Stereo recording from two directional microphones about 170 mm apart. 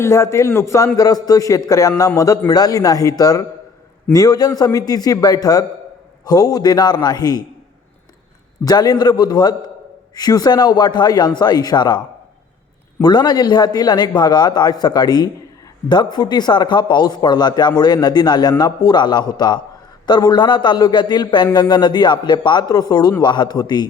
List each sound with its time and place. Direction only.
0.0 s a man's voice: 15° left (ahead or behind)
8.6 s speech: 25° left (ahead or behind)
13.0 s speech: 25° left (ahead or behind)